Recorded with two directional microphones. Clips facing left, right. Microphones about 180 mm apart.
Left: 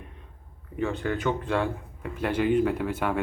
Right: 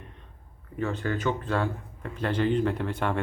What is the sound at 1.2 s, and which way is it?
Speech, 15° left (ahead or behind).